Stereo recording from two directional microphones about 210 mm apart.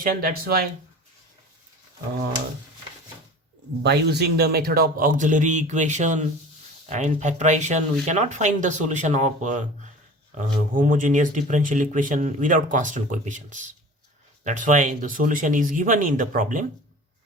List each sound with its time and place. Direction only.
0.0 s speech: 45° right (ahead or behind)
3.8 s speech: 50° right (ahead or behind)